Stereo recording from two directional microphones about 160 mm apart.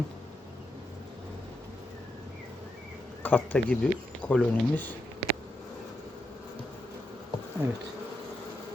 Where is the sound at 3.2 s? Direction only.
10° left (ahead or behind).